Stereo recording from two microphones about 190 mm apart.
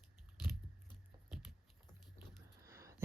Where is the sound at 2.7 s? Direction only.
15° right (ahead or behind).